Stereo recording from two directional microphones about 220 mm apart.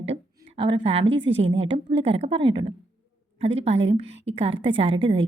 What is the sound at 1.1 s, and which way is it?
A woman's voice, 25° right (ahead or behind).